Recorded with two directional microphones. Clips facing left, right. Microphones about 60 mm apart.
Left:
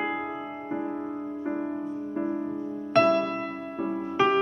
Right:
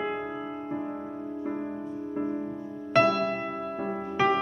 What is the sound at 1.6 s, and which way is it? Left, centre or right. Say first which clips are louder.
Music: left 2 dB; centre.